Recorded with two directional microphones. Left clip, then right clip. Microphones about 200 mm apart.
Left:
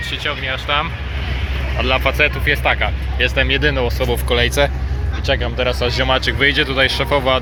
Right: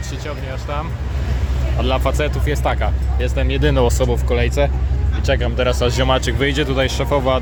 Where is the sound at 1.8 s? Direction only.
15° right (ahead or behind).